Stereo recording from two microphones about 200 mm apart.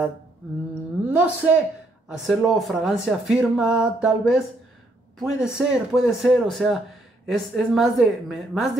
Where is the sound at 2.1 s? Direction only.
Centre (ahead or behind).